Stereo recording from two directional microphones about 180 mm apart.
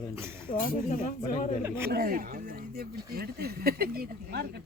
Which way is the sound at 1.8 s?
55° right (ahead or behind).